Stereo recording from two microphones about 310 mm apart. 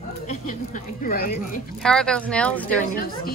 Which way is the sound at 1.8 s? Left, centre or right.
Centre.